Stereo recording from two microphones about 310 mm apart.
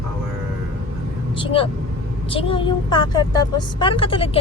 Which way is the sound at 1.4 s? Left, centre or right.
Centre.